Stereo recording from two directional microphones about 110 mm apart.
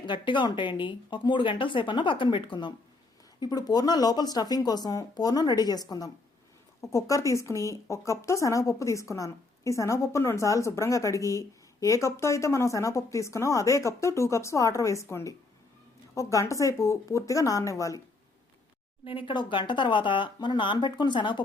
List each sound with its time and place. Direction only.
0.0 s speech: 45° left (ahead or behind); by 18.0 s 30° left (ahead or behind)
19.0 s speech: 50° left (ahead or behind)